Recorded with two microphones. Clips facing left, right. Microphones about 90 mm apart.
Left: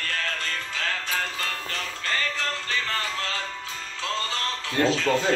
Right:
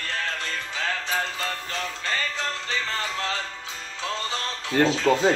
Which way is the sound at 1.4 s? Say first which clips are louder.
Right 2 dB; 20° right (ahead or behind).